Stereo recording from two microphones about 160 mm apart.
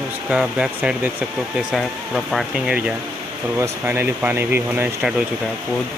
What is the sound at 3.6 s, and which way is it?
A man's voice, 15° right (ahead or behind).